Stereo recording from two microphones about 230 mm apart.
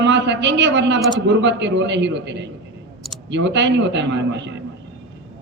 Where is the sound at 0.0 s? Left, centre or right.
Right.